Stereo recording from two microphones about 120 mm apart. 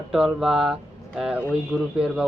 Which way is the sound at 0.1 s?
5° right (ahead or behind).